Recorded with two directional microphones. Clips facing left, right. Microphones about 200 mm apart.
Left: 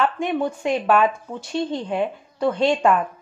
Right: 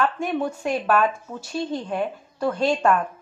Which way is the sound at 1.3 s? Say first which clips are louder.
Left 3 dB; 15° left (ahead or behind).